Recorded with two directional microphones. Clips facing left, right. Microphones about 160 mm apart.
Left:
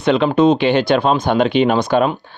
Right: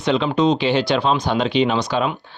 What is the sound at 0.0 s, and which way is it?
Speech, 55° left (ahead or behind).